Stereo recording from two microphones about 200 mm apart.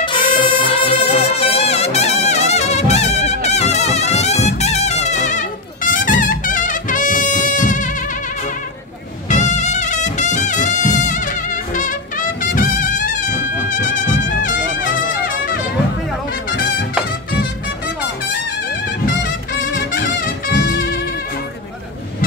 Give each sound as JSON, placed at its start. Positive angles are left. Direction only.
{"t": 0.4, "sound": "music", "side_deg": 25}